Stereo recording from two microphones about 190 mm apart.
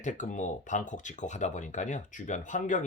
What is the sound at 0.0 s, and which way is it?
Speech, 40° left (ahead or behind).